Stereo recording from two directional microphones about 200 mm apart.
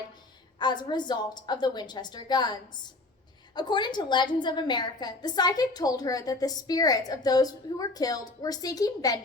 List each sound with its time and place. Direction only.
0.6 s a woman's voice: 20° left (ahead or behind)